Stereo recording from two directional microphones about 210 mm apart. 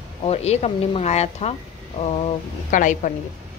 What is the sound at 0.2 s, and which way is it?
A woman's voice, 30° left (ahead or behind).